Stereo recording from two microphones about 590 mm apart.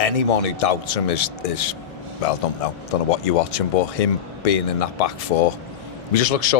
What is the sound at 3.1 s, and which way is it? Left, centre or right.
Speech, left.